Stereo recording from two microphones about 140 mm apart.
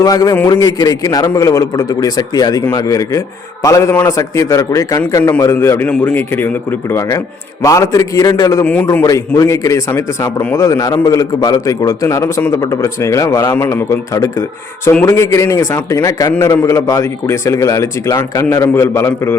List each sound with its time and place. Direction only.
0.0 s a man's voice: 25° left (ahead or behind)
8.6 s speech: 10° left (ahead or behind)
9.0 s a man's voice: 25° left (ahead or behind)